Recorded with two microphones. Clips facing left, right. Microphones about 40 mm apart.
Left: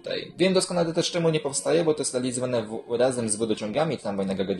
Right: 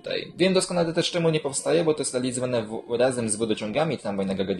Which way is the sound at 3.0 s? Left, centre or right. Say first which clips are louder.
Even; right.